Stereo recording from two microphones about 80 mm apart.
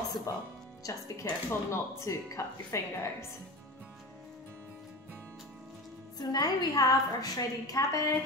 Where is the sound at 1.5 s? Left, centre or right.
Left.